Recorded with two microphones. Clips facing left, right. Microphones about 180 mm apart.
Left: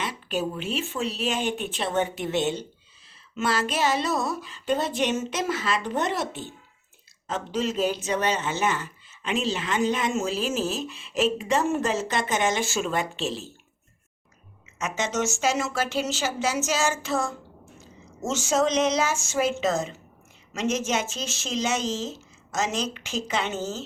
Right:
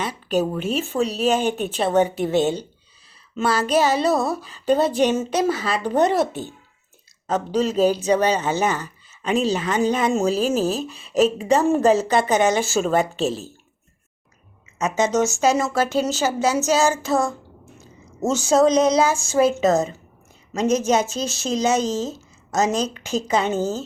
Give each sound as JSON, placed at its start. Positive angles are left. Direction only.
{"t": 0.0, "sound": "speech", "side_deg": -40}
{"t": 14.8, "sound": "speech", "side_deg": -35}